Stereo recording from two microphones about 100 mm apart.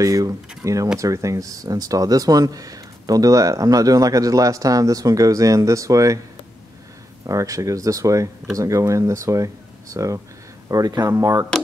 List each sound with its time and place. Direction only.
0.0 s speech: 35° right (ahead or behind)
7.2 s speech: 35° right (ahead or behind)